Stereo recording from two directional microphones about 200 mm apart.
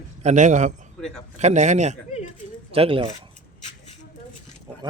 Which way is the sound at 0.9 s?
Centre (ahead or behind).